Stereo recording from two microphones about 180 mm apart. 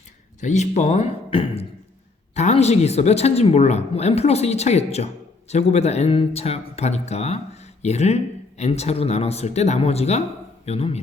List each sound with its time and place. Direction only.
0.3 s speech: 40° left (ahead or behind)